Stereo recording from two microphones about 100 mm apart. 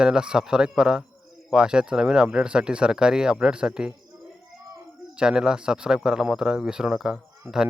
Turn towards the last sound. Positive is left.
turn(degrees=-5)  # may be behind; listen again after turning